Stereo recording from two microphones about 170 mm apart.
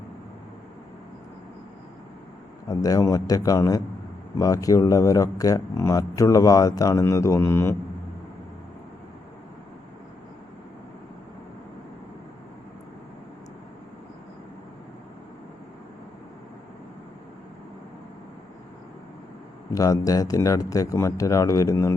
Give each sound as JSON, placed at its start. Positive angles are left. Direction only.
{"t": 2.6, "sound": "speech", "side_deg": 20}
{"t": 19.7, "sound": "speech", "side_deg": 20}